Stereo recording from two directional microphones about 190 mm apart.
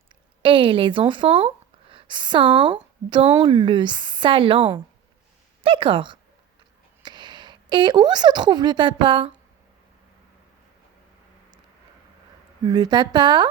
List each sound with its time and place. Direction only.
0.4 s a woman's voice: 25° right (ahead or behind)
12.6 s speech: 20° right (ahead or behind)